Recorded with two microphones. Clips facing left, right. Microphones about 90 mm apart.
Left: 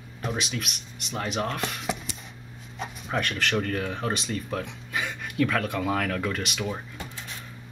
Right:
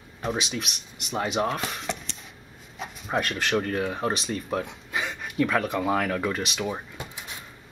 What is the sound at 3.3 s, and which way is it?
Speech, 15° right (ahead or behind).